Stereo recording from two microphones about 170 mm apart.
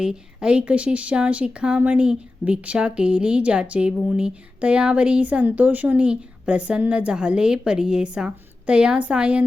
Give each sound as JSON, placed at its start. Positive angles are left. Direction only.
{"t": 0.0, "sound": "speech", "side_deg": -5}